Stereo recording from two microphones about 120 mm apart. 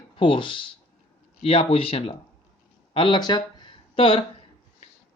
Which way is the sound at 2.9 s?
45° left (ahead or behind).